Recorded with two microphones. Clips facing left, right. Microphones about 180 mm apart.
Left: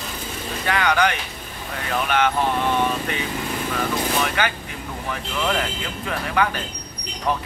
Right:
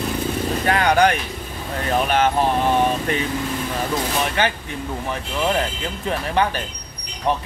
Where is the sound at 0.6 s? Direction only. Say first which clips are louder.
Right 3 dB; 45° right (ahead or behind).